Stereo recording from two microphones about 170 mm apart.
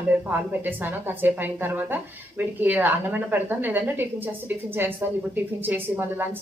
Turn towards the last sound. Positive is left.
turn(degrees=-10)  # may be behind; listen again after turning